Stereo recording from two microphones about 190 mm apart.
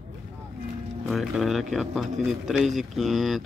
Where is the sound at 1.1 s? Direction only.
Centre (ahead or behind).